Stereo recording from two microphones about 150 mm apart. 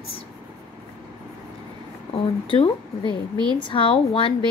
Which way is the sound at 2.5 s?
35° left (ahead or behind).